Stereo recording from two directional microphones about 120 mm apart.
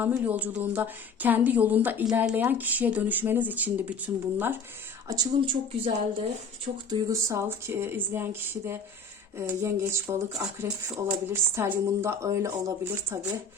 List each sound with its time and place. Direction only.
0.0 s a woman's voice: 15° right (ahead or behind)
5.1 s speech: 30° right (ahead or behind)
5.5 s speech: 45° right (ahead or behind)
7.1 s speech: 30° right (ahead or behind)
7.4 s speech: 20° right (ahead or behind)